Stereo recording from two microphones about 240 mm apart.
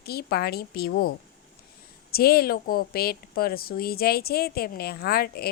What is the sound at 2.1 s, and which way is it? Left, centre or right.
Speech, left.